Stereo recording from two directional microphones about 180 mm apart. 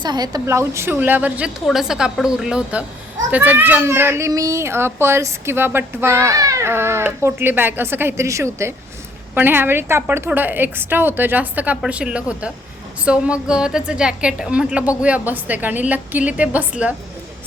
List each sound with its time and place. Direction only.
0.0 s a child's voice: 20° right (ahead or behind)